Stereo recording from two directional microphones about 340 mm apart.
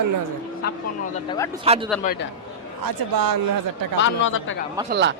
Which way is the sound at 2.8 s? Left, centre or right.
Right.